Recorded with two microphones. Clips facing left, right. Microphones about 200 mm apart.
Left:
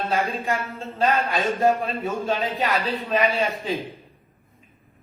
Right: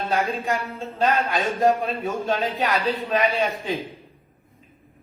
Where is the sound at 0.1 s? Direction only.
Centre (ahead or behind).